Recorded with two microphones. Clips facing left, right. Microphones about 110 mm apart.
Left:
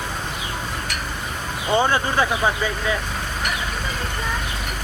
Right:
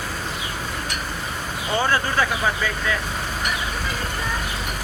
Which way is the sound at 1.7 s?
20° left (ahead or behind).